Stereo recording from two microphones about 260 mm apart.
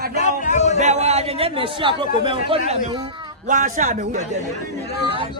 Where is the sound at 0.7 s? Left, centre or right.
Right.